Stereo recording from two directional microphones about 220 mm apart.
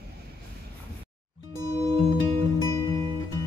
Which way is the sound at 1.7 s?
25° right (ahead or behind).